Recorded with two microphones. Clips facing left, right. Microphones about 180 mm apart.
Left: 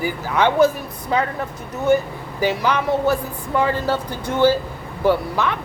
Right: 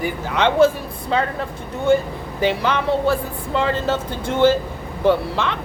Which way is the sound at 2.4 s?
25° right (ahead or behind).